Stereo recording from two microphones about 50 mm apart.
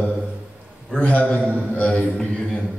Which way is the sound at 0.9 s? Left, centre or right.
Left.